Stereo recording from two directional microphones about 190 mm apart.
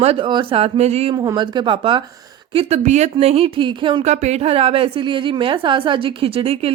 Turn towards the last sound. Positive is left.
turn(degrees=-30)  # may be behind; listen again after turning